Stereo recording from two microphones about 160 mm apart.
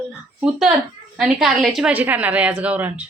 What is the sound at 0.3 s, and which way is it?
A woman's voice, centre (ahead or behind).